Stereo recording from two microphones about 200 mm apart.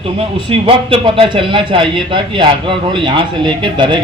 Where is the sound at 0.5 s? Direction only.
25° right (ahead or behind).